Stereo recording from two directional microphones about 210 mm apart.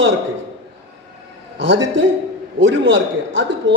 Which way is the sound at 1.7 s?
60° right (ahead or behind).